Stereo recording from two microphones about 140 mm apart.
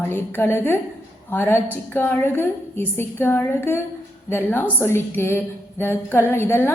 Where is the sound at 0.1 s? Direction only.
15° left (ahead or behind).